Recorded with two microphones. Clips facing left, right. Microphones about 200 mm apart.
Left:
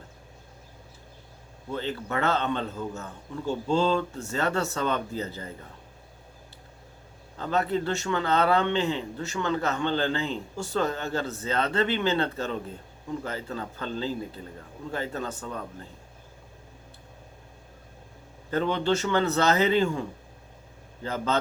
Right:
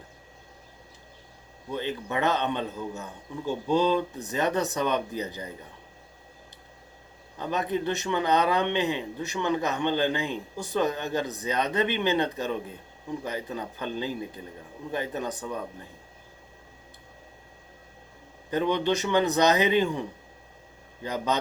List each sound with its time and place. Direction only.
1.7 s a man's voice: 15° right (ahead or behind)
7.3 s a man's voice: 15° right (ahead or behind)
18.5 s a man's voice: 15° right (ahead or behind)